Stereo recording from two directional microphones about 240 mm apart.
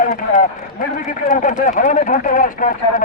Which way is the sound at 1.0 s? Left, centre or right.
Left.